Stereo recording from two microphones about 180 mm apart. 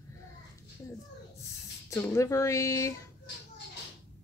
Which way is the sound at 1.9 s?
15° left (ahead or behind).